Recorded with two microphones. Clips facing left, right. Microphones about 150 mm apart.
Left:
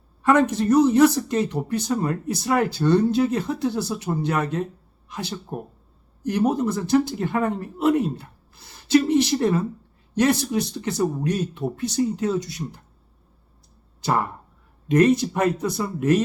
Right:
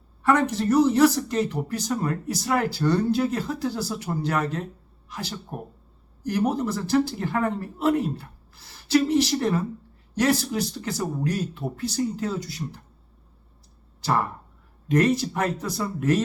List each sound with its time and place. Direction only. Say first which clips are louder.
0.2 s speech: left 3 dB; 20° left (ahead or behind)
14.8 s speech: left 4 dB; 20° left (ahead or behind)